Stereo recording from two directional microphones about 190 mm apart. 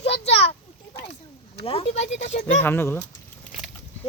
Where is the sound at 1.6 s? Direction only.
30° left (ahead or behind).